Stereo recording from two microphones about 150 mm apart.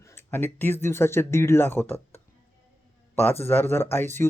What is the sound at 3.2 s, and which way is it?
Speech, 15° left (ahead or behind).